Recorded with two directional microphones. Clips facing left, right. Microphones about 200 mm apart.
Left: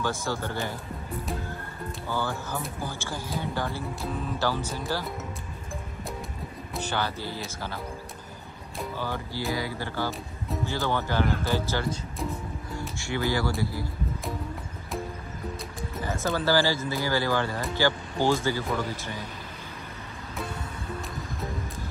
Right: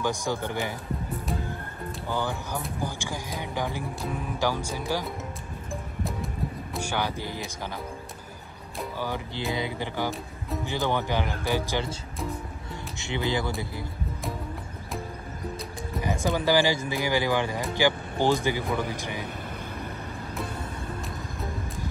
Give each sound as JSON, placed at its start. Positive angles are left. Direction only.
{"t": 0.0, "sound": "speech", "side_deg": -15}
{"t": 2.0, "sound": "speech", "side_deg": -15}
{"t": 6.0, "sound": "music", "side_deg": 0}
{"t": 6.8, "sound": "speech", "side_deg": -10}
{"t": 8.9, "sound": "speech", "side_deg": -15}
{"t": 16.0, "sound": "speech", "side_deg": -15}